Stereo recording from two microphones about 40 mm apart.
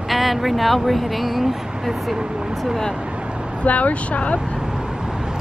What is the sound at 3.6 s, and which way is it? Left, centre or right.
Speech, left.